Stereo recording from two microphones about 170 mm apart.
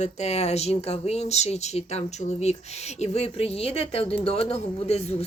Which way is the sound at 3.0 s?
40° left (ahead or behind).